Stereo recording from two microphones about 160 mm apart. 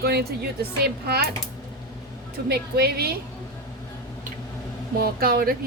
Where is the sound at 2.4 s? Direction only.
85° right.